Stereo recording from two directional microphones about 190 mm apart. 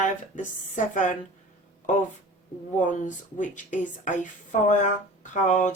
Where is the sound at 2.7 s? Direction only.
40° left (ahead or behind).